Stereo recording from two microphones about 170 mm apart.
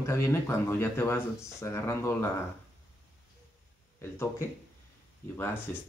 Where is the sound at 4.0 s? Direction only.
15° left (ahead or behind).